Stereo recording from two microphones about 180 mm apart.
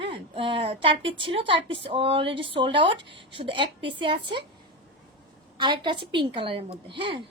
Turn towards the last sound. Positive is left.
turn(degrees=-25)  # may be behind; listen again after turning